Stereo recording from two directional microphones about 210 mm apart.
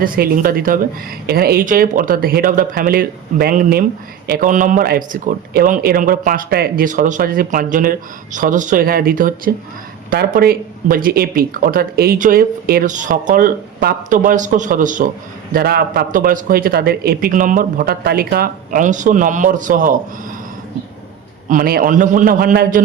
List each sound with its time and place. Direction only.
0.0 s speech: 45° right (ahead or behind)
21.5 s speech: 45° right (ahead or behind)